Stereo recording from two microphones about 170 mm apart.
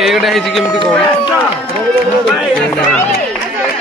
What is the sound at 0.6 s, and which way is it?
Speech, 25° left (ahead or behind).